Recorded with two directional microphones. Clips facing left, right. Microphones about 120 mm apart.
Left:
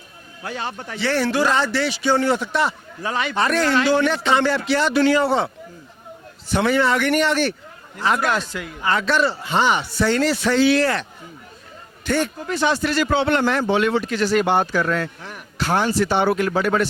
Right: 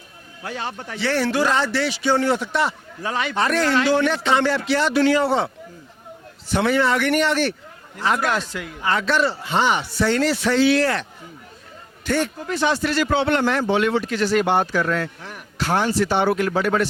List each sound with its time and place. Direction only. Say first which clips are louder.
0.4 s a man's voice: left 1 dB; 25° left (ahead or behind)
6.5 s a man's voice: left 1 dB; 20° left (ahead or behind)
12.0 s a man's voice: left 1 dB; 25° left (ahead or behind)